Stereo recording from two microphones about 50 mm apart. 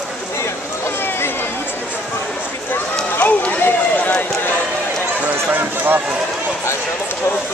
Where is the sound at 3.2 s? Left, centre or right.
Left.